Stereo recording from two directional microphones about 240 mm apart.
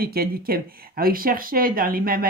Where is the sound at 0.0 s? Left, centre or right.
Right.